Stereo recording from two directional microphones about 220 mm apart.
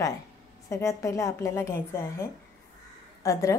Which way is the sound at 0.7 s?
15° left (ahead or behind).